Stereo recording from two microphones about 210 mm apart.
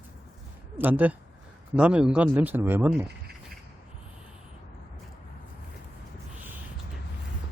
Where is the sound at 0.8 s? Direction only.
10° right (ahead or behind).